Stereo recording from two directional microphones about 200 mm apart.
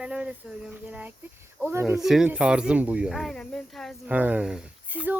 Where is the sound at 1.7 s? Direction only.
10° right (ahead or behind).